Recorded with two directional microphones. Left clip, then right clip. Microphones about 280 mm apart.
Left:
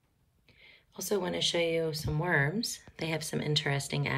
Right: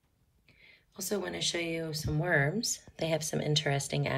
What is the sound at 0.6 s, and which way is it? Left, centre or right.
Speech, centre.